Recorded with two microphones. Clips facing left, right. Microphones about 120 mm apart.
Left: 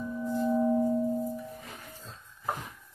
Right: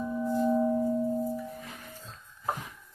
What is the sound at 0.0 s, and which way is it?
Singing bowl, 20° right (ahead or behind).